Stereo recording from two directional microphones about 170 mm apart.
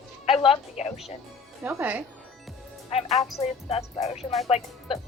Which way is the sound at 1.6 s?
10° right (ahead or behind).